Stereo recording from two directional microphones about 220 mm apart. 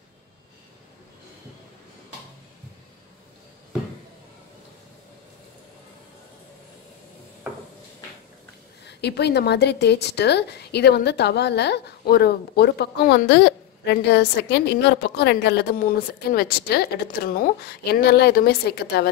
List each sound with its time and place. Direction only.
8.8 s a woman's voice: 50° left (ahead or behind)